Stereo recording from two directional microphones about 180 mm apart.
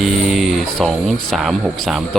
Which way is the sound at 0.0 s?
Centre (ahead or behind).